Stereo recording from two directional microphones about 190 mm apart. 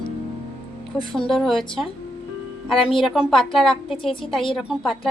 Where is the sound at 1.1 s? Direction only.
Centre (ahead or behind).